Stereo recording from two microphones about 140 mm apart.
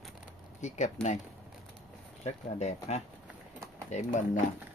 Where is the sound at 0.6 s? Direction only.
55° left (ahead or behind).